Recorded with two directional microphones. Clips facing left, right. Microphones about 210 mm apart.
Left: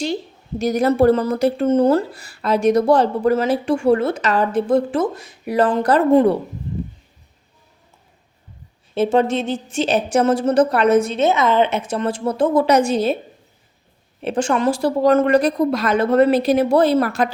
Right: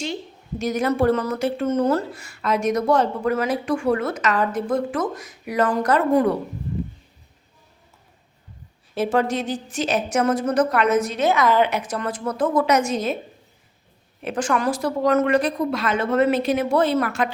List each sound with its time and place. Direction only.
0.6 s speech: 35° left (ahead or behind)
9.0 s a woman's voice: 25° left (ahead or behind)
14.2 s speech: 30° left (ahead or behind)